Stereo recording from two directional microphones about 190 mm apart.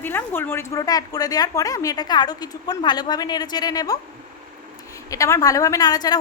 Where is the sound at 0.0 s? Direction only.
10° left (ahead or behind).